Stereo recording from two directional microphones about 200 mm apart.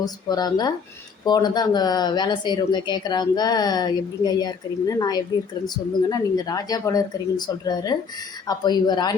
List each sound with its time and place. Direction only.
0.0 s speech: 20° left (ahead or behind)